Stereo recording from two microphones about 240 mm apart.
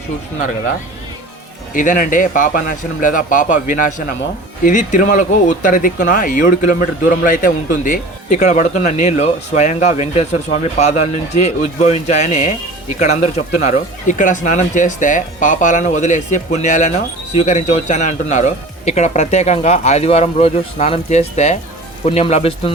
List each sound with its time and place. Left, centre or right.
1.7 s a man's voice: left